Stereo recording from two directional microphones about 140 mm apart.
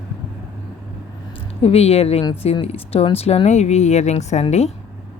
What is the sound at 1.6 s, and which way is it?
Speech, 45° left (ahead or behind).